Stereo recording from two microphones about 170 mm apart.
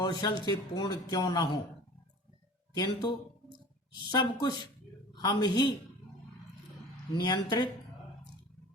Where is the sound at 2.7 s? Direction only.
25° left (ahead or behind).